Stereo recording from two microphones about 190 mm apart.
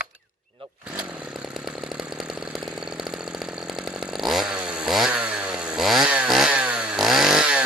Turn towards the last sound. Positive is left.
turn(degrees=-5)  # may be behind; listen again after turning